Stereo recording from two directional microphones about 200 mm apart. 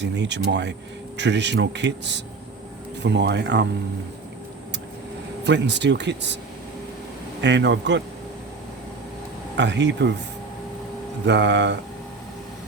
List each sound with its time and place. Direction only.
0.0 s a man's voice: 60° right (ahead or behind)
5.5 s a man's voice: 60° right (ahead or behind)
7.4 s a man's voice: 60° right (ahead or behind)
9.6 s a man's voice: 60° right (ahead or behind)
11.3 s a man's voice: 60° right (ahead or behind)